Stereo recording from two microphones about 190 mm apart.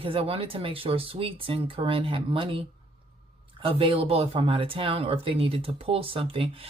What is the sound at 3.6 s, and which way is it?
Speech, 30° right (ahead or behind).